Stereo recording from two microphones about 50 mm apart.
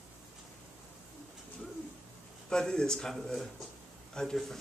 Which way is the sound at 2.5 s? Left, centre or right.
Centre.